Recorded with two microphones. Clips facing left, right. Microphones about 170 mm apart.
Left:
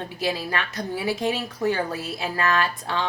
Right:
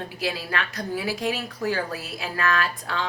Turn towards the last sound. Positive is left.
turn(degrees=25)  # may be behind; listen again after turning